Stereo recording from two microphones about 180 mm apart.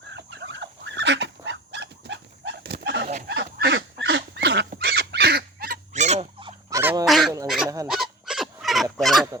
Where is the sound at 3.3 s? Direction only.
70° right (ahead or behind).